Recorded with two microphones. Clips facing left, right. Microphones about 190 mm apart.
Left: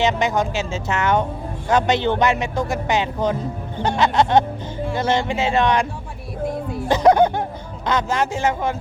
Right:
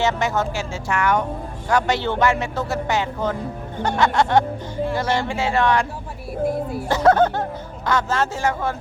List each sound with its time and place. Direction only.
0.0 s speech: 20° left (ahead or behind)
6.4 s speech: 5° right (ahead or behind)
6.8 s speech: 15° left (ahead or behind)